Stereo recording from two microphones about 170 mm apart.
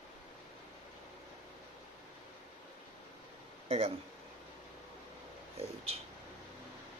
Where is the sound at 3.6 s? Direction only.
40° right (ahead or behind).